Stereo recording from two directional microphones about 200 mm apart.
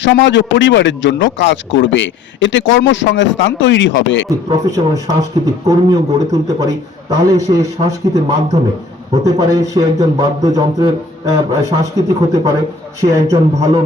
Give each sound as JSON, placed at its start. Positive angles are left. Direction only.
{"t": 0.0, "sound": "a man's voice", "side_deg": 65}
{"t": 4.4, "sound": "speech", "side_deg": -15}
{"t": 9.2, "sound": "speech", "side_deg": -20}